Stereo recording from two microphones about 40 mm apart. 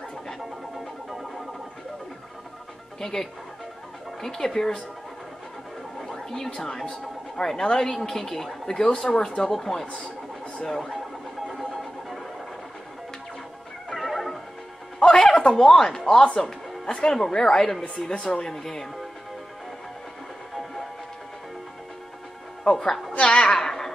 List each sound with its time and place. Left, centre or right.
3.0 s speech: centre
5.9 s speech: centre
11.4 s a sound: centre
13.9 s music: centre
15.0 s a sound: centre
16.3 s speech: centre
17.8 s speech: left; by 18.9 s centre
22.6 s a woman's voice: centre
23.2 s a woman's voice: left
23.6 s a sound: centre